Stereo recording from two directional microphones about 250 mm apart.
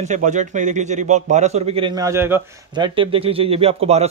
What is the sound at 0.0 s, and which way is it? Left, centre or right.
A man's voice, right.